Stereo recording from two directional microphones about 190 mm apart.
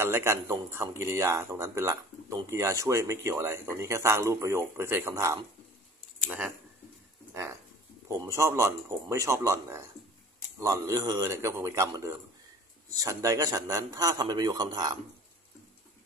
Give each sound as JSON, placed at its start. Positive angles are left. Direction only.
{"t": 0.0, "sound": "a man's voice", "side_deg": -15}
{"t": 8.1, "sound": "a man's voice", "side_deg": -15}